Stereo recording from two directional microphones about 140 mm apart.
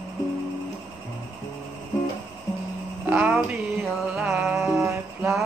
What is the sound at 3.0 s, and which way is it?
Speech, 10° right (ahead or behind).